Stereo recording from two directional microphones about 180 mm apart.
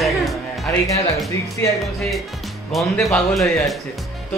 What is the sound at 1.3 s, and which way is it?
Speech, 15° left (ahead or behind).